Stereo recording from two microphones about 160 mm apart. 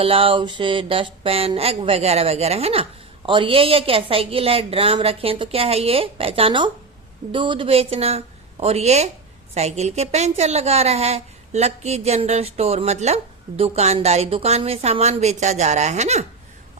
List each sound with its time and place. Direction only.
0.0 s a woman's voice: 35° right (ahead or behind)